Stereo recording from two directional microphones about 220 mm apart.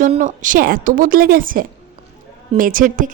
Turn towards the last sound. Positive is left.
turn(degrees=-40)  # may be behind; listen again after turning